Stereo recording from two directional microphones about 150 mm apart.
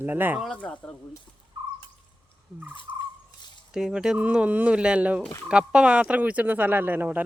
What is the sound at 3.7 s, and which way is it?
Speech, 5° right (ahead or behind).